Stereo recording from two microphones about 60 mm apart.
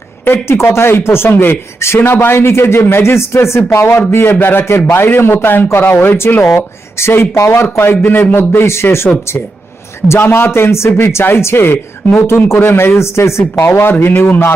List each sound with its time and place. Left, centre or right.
0.4 s speech: left